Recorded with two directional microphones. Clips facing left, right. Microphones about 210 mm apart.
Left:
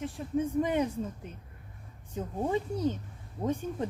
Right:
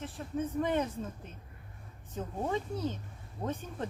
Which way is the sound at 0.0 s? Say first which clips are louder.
Left 5 dB; 10° left (ahead or behind).